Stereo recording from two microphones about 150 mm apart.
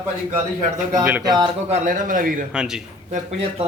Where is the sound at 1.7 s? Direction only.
60° right (ahead or behind).